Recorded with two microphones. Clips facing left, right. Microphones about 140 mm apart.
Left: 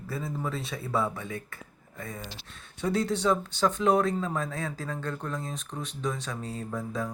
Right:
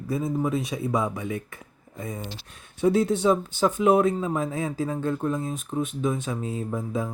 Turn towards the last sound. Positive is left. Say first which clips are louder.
# right 4 dB
turn(degrees=-20)  # may be behind; listen again after turning